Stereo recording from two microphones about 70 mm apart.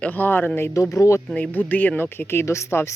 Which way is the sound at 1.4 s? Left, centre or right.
Left.